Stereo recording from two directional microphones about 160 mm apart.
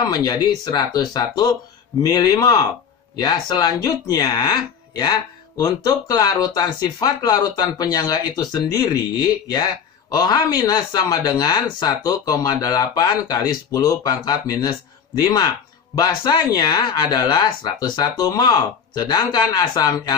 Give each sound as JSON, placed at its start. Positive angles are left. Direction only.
{"t": 0.1, "sound": "speech", "side_deg": 25}